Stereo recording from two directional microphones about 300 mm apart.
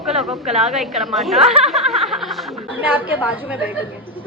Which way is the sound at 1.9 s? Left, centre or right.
Centre.